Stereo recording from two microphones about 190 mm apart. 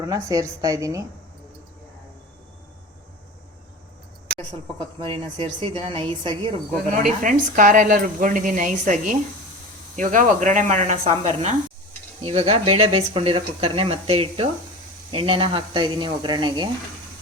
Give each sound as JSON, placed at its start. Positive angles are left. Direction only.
{"t": 0.0, "sound": "a woman's voice", "side_deg": -15}
{"t": 4.9, "sound": "speech", "side_deg": -30}
{"t": 7.0, "sound": "speech", "side_deg": -45}